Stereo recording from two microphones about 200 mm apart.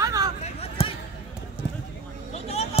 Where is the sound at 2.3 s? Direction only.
30° left (ahead or behind).